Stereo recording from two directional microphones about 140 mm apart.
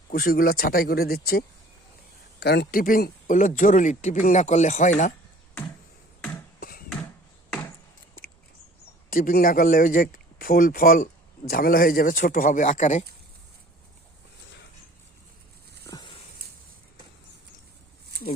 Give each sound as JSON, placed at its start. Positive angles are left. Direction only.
{"t": 0.1, "sound": "speech", "side_deg": 90}
{"t": 2.7, "sound": "speech", "side_deg": 90}
{"t": 6.6, "sound": "bouncing", "side_deg": 90}
{"t": 9.0, "sound": "speech", "side_deg": 90}
{"t": 15.8, "sound": "a sound", "side_deg": 30}